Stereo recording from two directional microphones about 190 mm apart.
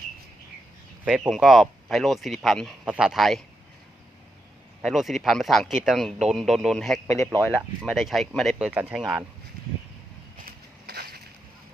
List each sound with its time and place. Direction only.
1.0 s speech: 5° right (ahead or behind)
4.8 s speech: centre (ahead or behind)
10.8 s boat: 55° right (ahead or behind)